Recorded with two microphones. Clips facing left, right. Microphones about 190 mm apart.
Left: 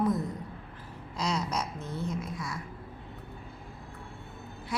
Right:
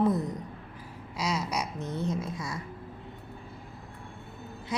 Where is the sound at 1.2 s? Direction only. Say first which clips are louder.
Even; 10° right (ahead or behind); by 2.5 s 25° right (ahead or behind).